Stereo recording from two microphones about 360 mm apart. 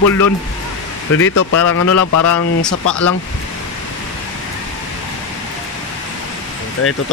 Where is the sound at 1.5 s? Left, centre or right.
Left.